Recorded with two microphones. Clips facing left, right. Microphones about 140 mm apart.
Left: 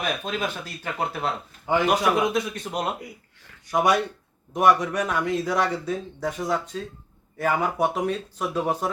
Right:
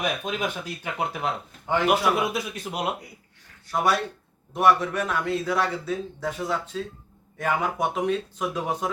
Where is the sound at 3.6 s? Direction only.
15° left (ahead or behind).